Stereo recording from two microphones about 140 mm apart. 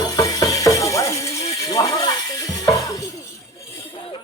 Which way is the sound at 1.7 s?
25° left (ahead or behind).